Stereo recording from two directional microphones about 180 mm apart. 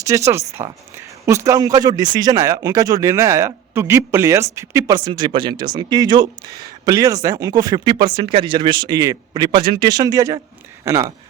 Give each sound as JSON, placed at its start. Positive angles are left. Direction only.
{"t": 0.0, "sound": "speech", "side_deg": -15}